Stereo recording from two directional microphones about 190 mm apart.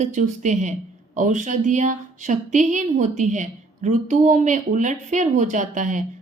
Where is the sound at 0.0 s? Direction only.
40° right (ahead or behind).